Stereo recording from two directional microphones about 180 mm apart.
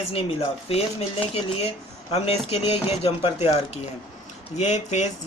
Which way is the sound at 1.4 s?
35° left (ahead or behind).